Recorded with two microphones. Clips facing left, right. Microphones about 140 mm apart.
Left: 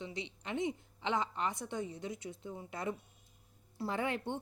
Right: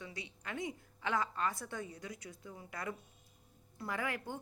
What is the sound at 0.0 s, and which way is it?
A woman's voice, 20° left (ahead or behind).